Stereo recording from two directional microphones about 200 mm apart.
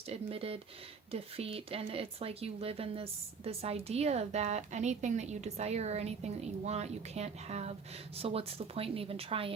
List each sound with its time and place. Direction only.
0.1 s speech: 30° right (ahead or behind)